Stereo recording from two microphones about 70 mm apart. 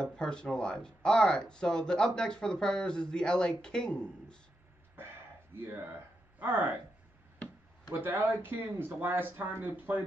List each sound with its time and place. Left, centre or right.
0.0 s speech: centre
5.6 s speech: right
7.9 s speech: right